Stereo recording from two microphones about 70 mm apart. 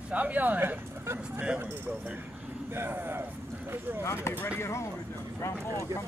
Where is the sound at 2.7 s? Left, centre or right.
Right.